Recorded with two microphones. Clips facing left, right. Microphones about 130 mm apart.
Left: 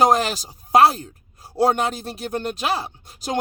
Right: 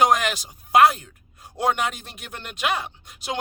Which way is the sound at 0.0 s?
35° left (ahead or behind).